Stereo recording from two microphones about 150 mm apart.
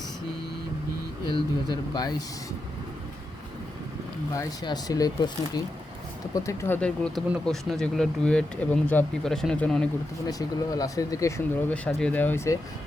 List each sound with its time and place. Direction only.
1.3 s speech: 30° left (ahead or behind)
4.4 s speech: 25° left (ahead or behind)
6.7 s speech: 5° left (ahead or behind)
10.2 s speech: 25° left (ahead or behind)
11.7 s speech: 5° left (ahead or behind)